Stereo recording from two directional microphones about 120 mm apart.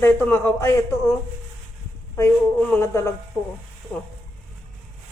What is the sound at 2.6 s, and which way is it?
Speech, 10° left (ahead or behind).